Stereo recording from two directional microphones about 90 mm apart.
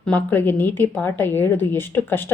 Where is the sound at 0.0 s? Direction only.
20° left (ahead or behind).